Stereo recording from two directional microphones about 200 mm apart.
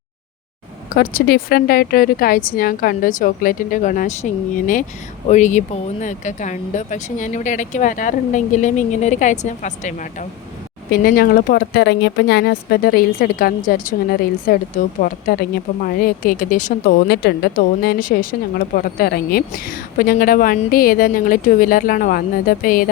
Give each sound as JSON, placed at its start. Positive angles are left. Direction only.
{"t": 0.9, "sound": "a woman's voice", "side_deg": 50}
{"t": 17.1, "sound": "a woman's voice", "side_deg": 55}